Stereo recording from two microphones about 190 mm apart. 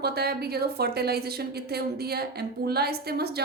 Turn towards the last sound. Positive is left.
turn(degrees=-55)  # may be behind; listen again after turning